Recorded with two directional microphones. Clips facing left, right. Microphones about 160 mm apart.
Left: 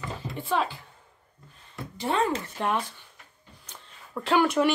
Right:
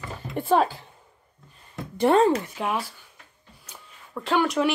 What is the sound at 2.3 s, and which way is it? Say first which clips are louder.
Speech: right 1 dB; 10° right (ahead or behind).